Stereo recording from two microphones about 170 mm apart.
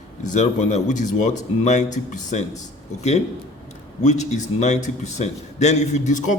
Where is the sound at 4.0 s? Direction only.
45° left (ahead or behind).